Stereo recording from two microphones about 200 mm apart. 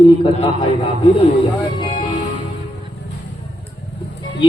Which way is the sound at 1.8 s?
25° left (ahead or behind).